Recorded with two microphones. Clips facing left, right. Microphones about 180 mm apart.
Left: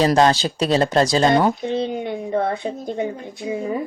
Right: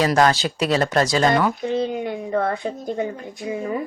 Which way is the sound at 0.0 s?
30° left (ahead or behind).